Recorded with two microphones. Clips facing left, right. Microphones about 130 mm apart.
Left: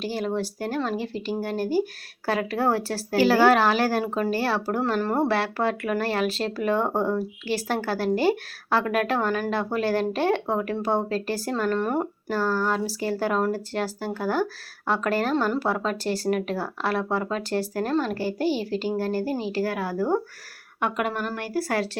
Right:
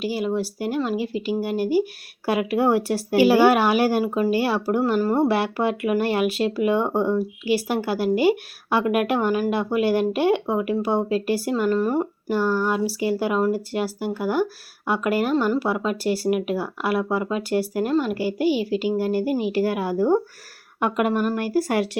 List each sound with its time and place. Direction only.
0.0 s speech: 10° right (ahead or behind)
5.3 s speech: 15° right (ahead or behind)
12.4 s a woman's voice: 15° right (ahead or behind)